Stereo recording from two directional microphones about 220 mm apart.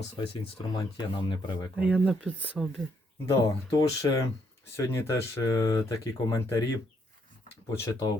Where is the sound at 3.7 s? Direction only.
15° left (ahead or behind).